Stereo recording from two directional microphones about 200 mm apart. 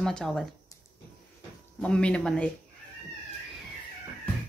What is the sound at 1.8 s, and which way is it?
Speech, 5° left (ahead or behind).